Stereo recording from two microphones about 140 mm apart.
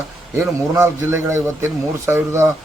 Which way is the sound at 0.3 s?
20° right (ahead or behind).